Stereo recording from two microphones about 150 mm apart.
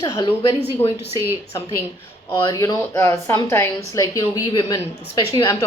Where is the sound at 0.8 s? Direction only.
40° left (ahead or behind).